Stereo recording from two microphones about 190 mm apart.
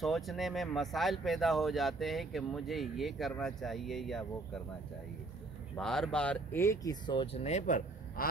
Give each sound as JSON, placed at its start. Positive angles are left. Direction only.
{"t": 0.0, "sound": "speech", "side_deg": 0}
{"t": 5.8, "sound": "speech", "side_deg": 5}